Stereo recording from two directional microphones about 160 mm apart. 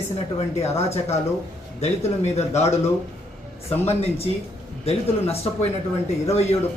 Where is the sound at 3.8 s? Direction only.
40° left (ahead or behind).